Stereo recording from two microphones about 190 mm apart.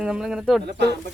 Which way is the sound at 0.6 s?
60° right (ahead or behind).